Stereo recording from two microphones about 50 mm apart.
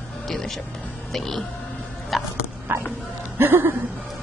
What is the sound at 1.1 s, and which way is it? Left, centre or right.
Speech, centre.